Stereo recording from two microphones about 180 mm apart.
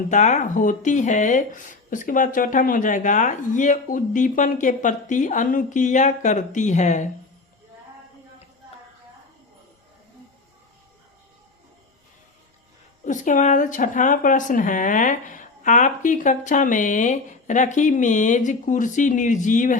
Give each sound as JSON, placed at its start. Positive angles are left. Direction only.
{"t": 0.1, "sound": "speech", "side_deg": 40}
{"t": 13.1, "sound": "speech", "side_deg": 45}